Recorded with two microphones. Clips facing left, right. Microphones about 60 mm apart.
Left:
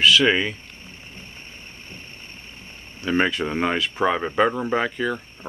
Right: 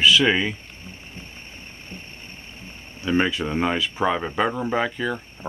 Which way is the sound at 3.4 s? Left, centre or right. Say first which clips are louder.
Even; centre.